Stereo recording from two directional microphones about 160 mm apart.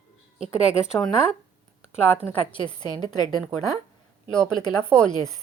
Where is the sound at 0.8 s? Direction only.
5° right (ahead or behind).